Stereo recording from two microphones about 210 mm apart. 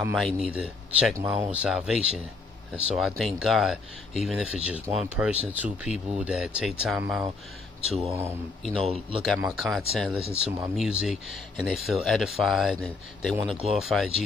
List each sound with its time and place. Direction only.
0.1 s speech: centre (ahead or behind)
8.8 s speech: 30° right (ahead or behind)
9.4 s speech: centre (ahead or behind)